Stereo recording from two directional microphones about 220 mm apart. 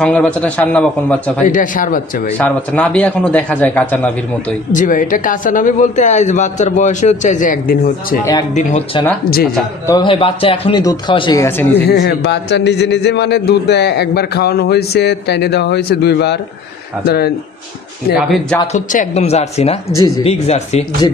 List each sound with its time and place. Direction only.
0.0 s a man's voice: 5° left (ahead or behind)
1.4 s speech: 35° left (ahead or behind)
2.3 s speech: 5° left (ahead or behind)
4.7 s speech: 35° left (ahead or behind)
8.5 s speech: 30° left (ahead or behind); by 11.8 s 10° left (ahead or behind)
11.9 s a man's voice: 45° left (ahead or behind)
18.1 s a man's voice: centre (ahead or behind)
18.6 s speech: 35° left (ahead or behind)